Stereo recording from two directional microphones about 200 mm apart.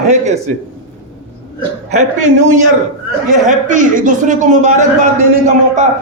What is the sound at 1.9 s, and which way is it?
A man's voice, 35° right (ahead or behind).